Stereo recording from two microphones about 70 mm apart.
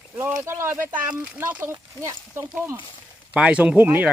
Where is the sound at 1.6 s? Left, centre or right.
Right.